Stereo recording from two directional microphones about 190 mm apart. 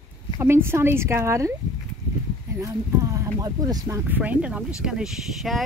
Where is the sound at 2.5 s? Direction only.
15° right (ahead or behind); by 5.6 s centre (ahead or behind).